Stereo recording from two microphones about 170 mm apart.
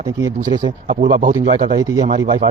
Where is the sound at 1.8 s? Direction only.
20° right (ahead or behind).